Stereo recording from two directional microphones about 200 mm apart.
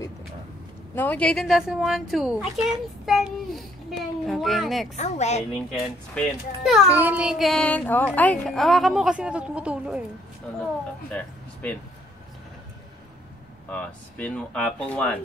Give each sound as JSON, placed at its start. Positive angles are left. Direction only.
{"t": 0.9, "sound": "a child's voice", "side_deg": 10}
{"t": 4.9, "sound": "a woman's voice", "side_deg": 35}
{"t": 5.5, "sound": "a child's voice", "side_deg": 5}
{"t": 11.1, "sound": "speech", "side_deg": 5}
{"t": 13.7, "sound": "speech", "side_deg": 5}